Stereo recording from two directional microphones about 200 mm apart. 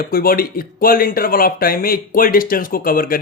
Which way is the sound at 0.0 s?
50° left (ahead or behind).